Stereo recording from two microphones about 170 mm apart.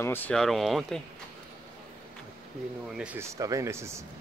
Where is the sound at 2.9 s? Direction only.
5° right (ahead or behind).